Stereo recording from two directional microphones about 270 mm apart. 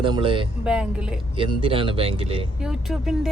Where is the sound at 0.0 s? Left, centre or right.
Centre.